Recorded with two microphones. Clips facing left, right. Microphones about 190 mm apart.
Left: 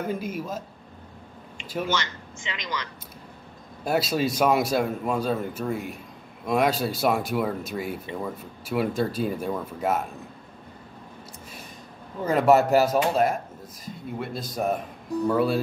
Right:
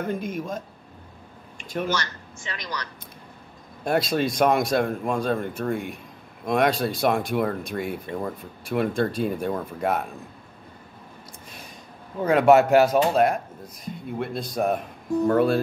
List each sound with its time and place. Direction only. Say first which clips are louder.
0.0 s a man's voice: right 1 dB; 5° left (ahead or behind)
1.9 s a man's voice: even; 20° left (ahead or behind)
3.8 s a man's voice: right 1 dB; 5° left (ahead or behind)
12.3 s a man's voice: right 3 dB; centre (ahead or behind)